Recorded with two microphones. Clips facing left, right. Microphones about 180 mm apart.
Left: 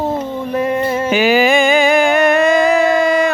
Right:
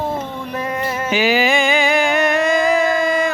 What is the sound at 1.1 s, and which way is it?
Music, 55° left (ahead or behind).